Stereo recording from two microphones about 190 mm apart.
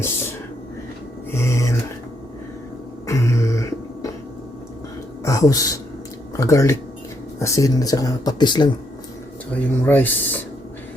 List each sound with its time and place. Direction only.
1.3 s a sound: 15° left (ahead or behind)
3.1 s beatboxing: 15° left (ahead or behind)
5.2 s speech: 15° left (ahead or behind)
9.5 s speech: 10° left (ahead or behind)